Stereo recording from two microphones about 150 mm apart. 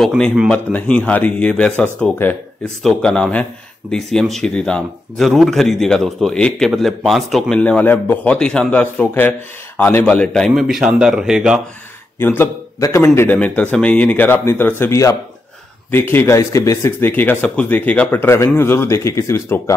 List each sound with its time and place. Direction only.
0.0 s a man's voice: 5° right (ahead or behind)
0.5 s a man's voice: 10° left (ahead or behind)
12.2 s speech: 15° left (ahead or behind)